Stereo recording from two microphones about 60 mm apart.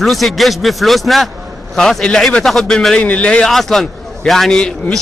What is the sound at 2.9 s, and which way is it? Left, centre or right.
Speech, centre.